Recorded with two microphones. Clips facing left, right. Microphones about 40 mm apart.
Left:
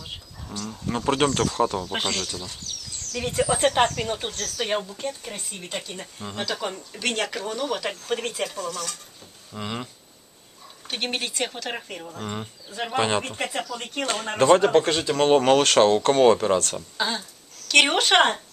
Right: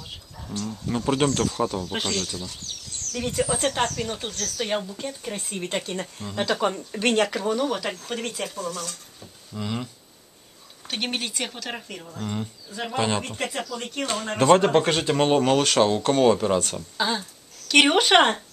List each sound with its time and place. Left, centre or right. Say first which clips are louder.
0.7 s speech: left 1 dB; centre
1.9 s speech: even; centre
4.6 s speech: left 2 dB; centre
5.5 s speech: right 7 dB; right
6.2 s speech: even; centre
7.2 s speech: right 5 dB; centre
8.1 s speech: left 6 dB; centre
8.5 s speech: even; left
9.5 s speech: right 1 dB; centre
10.9 s speech: even; centre
14.6 s speech: left 1 dB; centre
14.9 s speech: right 1 dB; centre
15.3 s speech: left 4 dB; centre